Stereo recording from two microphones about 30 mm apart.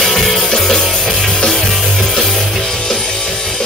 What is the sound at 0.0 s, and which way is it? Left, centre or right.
Music, centre.